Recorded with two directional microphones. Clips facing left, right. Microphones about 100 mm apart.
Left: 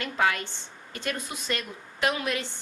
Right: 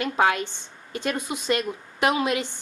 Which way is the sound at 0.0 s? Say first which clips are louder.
Right 4 dB; 20° right (ahead or behind).